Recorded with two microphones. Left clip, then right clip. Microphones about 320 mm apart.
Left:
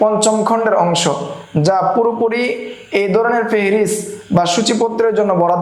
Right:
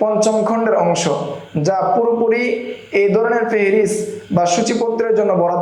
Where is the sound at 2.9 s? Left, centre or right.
Left.